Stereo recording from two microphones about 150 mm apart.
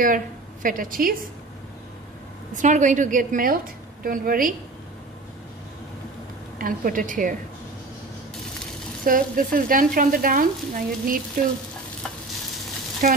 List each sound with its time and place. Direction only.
0.0 s a woman's voice: 65° right (ahead or behind)
2.5 s a woman's voice: 55° right (ahead or behind)
6.6 s a woman's voice: 65° right (ahead or behind)
9.0 s speech: 65° right (ahead or behind)
13.0 s a woman's voice: 65° right (ahead or behind)